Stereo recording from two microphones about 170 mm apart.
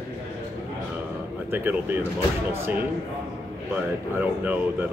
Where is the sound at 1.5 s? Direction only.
10° right (ahead or behind).